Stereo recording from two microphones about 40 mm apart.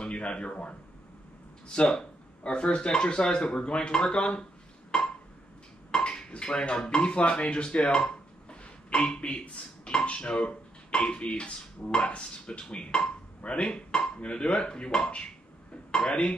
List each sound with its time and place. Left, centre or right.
0.0 s a man's voice: left
1.7 s speech: centre
4.9 s a sound: centre
5.9 s speech: left
7.8 s a sound: left
9.8 s speech: left
15.9 s speech: centre